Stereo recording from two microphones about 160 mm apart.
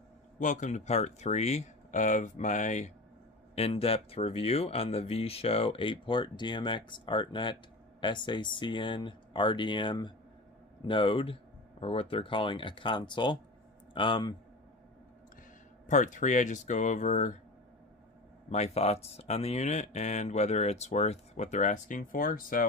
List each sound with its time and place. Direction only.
0.4 s speech: 50° left (ahead or behind)
3.5 s speech: 40° left (ahead or behind)
15.9 s speech: 50° left (ahead or behind)
18.5 s speech: 40° left (ahead or behind); by 22.7 s 60° left (ahead or behind)